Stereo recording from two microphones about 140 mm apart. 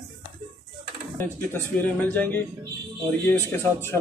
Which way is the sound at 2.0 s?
10° left (ahead or behind).